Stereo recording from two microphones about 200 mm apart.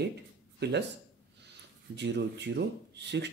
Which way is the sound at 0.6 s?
55° right (ahead or behind).